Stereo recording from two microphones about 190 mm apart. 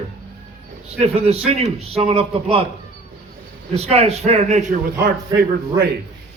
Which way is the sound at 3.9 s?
35° right (ahead or behind).